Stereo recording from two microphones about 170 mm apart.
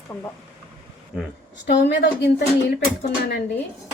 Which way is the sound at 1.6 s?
90° left.